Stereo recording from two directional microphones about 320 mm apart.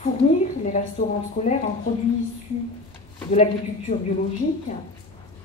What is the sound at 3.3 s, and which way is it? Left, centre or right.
Speech, left.